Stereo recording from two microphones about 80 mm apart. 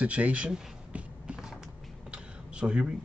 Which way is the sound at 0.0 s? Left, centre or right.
Centre.